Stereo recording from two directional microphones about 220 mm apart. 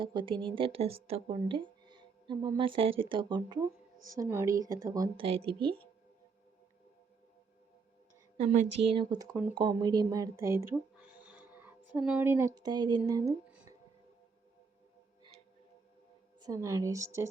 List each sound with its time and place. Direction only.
0.0 s speech: 20° right (ahead or behind)
8.4 s a woman's voice: 30° right (ahead or behind); by 13.3 s 15° right (ahead or behind)
16.4 s a woman's voice: 15° right (ahead or behind)